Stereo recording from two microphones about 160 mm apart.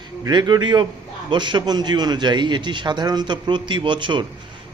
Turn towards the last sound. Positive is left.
turn(degrees=-30)  # may be behind; listen again after turning